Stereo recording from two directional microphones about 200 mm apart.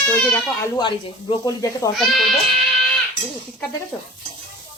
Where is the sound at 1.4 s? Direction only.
15° left (ahead or behind).